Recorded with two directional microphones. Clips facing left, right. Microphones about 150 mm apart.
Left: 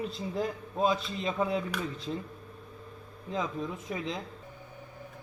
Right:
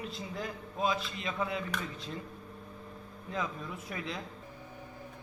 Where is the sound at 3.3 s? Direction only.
25° left (ahead or behind).